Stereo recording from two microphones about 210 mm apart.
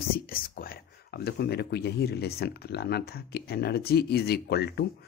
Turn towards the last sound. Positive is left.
turn(degrees=50)  # may be behind; listen again after turning